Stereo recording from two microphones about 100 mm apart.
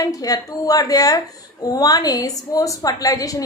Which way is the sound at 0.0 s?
35° left (ahead or behind).